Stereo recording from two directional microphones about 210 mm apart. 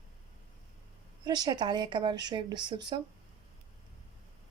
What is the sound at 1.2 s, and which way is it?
A woman's voice, 20° right (ahead or behind).